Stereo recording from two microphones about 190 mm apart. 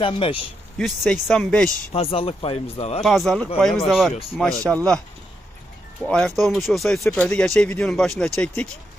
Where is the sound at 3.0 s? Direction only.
Centre (ahead or behind).